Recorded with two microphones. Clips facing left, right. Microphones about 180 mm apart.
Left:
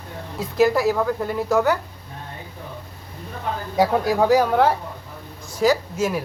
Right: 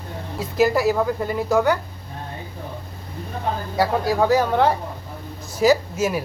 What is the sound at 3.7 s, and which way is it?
Speech, 20° left (ahead or behind).